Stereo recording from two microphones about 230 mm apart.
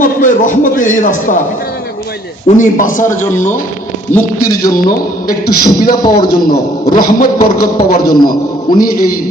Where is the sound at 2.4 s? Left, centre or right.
Left.